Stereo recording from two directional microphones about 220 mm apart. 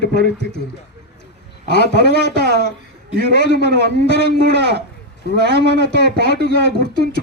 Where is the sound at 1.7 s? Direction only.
50° left (ahead or behind).